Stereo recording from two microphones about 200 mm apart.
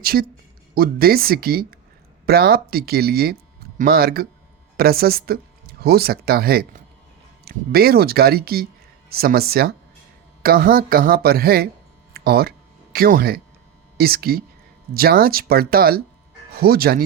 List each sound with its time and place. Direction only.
0.0 s speech: 50° right (ahead or behind)
12.1 s a sound: 50° right (ahead or behind)
14.0 s speech: 50° right (ahead or behind)